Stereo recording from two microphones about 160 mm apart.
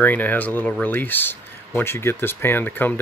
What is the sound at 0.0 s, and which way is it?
Speech, 10° left (ahead or behind).